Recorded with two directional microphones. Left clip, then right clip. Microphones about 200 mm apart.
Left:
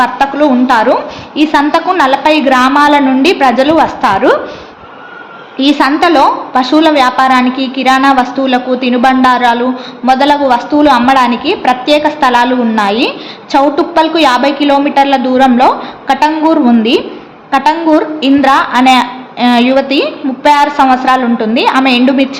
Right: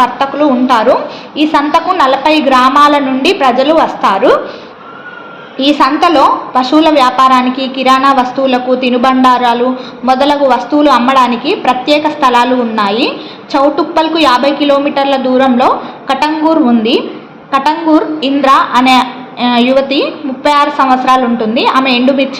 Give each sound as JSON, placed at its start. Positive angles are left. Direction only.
{"t": 0.0, "sound": "a woman's voice", "side_deg": 25}
{"t": 5.5, "sound": "a woman's voice", "side_deg": 20}